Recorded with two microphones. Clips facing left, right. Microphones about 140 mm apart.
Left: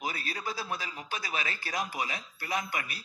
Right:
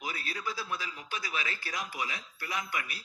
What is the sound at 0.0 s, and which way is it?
Speech, 35° left (ahead or behind).